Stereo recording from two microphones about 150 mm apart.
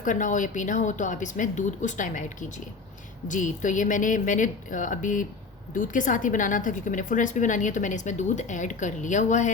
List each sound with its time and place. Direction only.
0.0 s a woman's voice: 60° left (ahead or behind)
3.2 s a woman's voice: 60° left (ahead or behind)